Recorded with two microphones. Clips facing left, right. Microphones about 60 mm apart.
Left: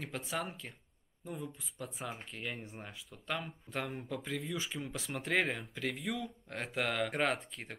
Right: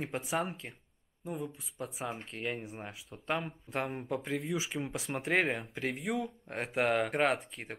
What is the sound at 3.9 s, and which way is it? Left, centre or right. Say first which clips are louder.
Speech: right 4 dB; right.